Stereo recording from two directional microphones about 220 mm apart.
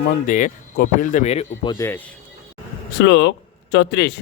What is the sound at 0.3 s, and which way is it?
Speech, 35° left (ahead or behind).